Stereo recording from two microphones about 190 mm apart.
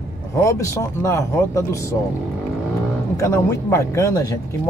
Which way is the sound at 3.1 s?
15° left (ahead or behind).